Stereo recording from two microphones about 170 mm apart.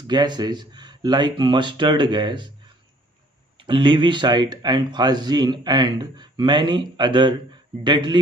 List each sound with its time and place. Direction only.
0.0 s speech: 25° right (ahead or behind)
3.5 s speech: 30° right (ahead or behind)